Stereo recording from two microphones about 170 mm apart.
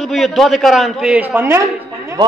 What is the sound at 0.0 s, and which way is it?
A man's voice, centre (ahead or behind).